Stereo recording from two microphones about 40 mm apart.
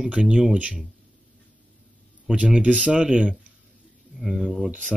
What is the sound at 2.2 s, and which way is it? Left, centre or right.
Speech, right.